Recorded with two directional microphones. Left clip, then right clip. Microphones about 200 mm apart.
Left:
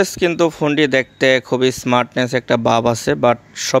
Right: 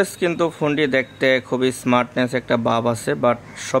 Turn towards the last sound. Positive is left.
turn(degrees=45)  # may be behind; listen again after turning